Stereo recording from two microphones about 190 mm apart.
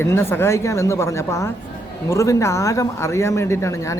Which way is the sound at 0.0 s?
15° left (ahead or behind).